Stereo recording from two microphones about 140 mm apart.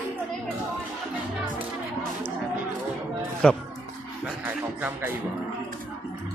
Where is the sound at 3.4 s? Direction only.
5° left (ahead or behind).